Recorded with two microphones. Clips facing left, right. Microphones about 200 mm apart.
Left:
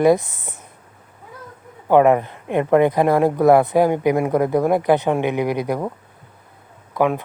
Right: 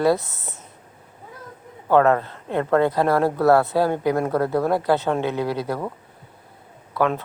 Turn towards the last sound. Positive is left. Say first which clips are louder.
# left 3 dB
turn(degrees=15)  # may be behind; listen again after turning